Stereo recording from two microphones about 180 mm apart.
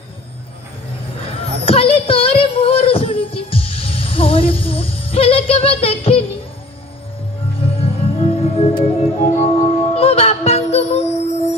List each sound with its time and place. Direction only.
1.2 s child singing: 30° left (ahead or behind)
7.8 s music: 30° left (ahead or behind)